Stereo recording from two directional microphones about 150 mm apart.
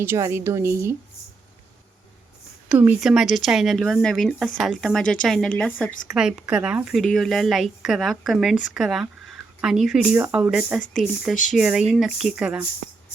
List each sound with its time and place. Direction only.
0.0 s a woman's voice: 15° right (ahead or behind)
2.6 s a woman's voice: 10° right (ahead or behind); by 6.1 s 10° left (ahead or behind)
6.1 s a woman's voice: 5° right (ahead or behind)